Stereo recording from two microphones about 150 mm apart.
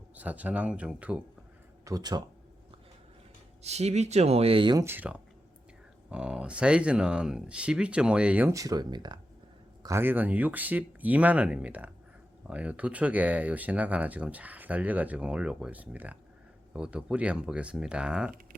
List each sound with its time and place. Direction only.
0.2 s speech: 10° right (ahead or behind)
1.8 s speech: 25° right (ahead or behind)
3.6 s speech: 45° right (ahead or behind)
4.8 s speech: 15° right (ahead or behind)
8.5 s speech: 25° right (ahead or behind)
9.8 s speech: 15° right (ahead or behind)